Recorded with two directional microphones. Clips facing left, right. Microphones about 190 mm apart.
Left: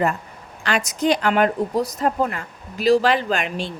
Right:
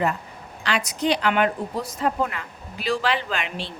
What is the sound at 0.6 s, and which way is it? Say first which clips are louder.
A woman's voice: left 3 dB; 45° left (ahead or behind).